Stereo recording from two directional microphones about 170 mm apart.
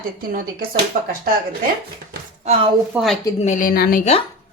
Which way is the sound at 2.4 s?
35° right (ahead or behind).